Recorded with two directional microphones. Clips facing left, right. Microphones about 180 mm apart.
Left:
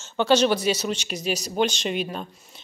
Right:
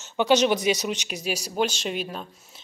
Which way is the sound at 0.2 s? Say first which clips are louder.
Left 1 dB; 15° right (ahead or behind).